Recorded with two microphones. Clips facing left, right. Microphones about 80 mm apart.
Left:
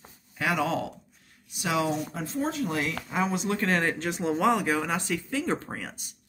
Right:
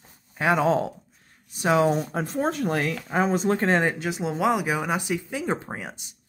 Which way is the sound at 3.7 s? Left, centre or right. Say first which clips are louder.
Right 2 dB; right.